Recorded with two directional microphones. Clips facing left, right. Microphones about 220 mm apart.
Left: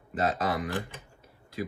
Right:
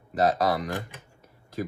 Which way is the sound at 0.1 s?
40° right (ahead or behind).